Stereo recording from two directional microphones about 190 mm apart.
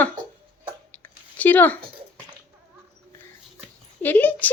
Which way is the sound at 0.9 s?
10° left (ahead or behind).